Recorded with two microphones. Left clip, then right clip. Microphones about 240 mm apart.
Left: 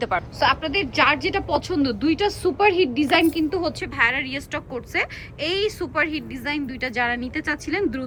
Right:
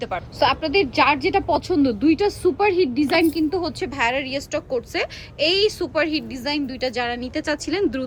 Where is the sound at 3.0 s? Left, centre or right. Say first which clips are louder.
Even; centre.